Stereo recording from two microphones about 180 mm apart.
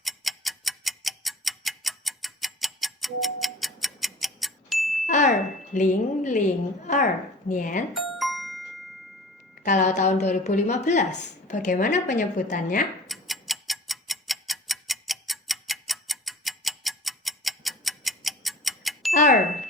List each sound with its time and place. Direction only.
0.0 s tick-tock: centre (ahead or behind)
5.0 s smoke detector: 45° left (ahead or behind)
6.8 s speech: 45° left (ahead or behind)
7.9 s music: centre (ahead or behind)
9.6 s speech: 40° left (ahead or behind)
13.1 s tick-tock: centre (ahead or behind)
19.1 s a sound: 45° left (ahead or behind)